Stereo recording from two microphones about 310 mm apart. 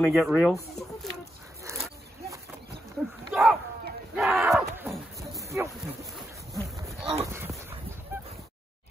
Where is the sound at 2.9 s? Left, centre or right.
Centre.